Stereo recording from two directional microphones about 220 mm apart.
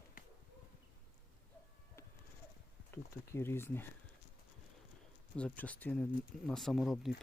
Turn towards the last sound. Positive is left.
turn(degrees=0)  # may be behind; listen again after turning